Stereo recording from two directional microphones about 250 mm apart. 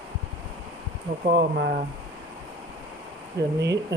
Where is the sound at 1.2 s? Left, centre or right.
Right.